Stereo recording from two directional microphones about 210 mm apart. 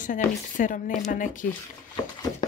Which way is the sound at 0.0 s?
40° left (ahead or behind).